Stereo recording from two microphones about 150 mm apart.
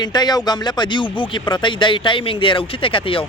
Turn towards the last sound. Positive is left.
turn(degrees=35)  # may be behind; listen again after turning